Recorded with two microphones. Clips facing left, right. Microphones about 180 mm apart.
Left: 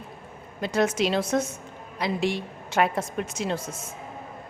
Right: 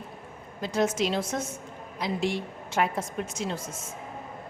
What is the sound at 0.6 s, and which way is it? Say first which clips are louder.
A woman's voice: left 2 dB; 70° left (ahead or behind).